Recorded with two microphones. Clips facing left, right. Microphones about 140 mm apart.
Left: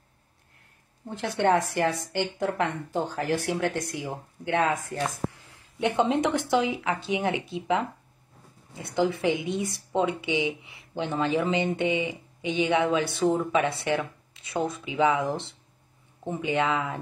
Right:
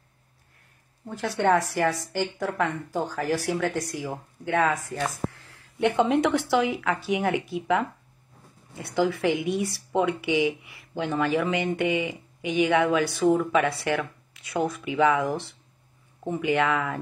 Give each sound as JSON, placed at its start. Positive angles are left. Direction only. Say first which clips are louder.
{"t": 1.0, "sound": "speech", "louder": "right 1 dB", "side_deg": 20}